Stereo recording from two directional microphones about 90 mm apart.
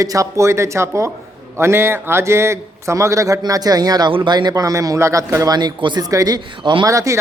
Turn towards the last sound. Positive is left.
turn(degrees=-35)  # may be behind; listen again after turning